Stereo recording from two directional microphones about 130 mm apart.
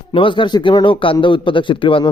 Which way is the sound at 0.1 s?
40° left (ahead or behind).